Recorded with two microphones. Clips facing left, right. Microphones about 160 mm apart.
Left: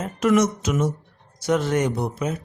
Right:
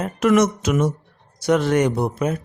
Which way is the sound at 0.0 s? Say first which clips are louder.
Right 2 dB; 70° right (ahead or behind).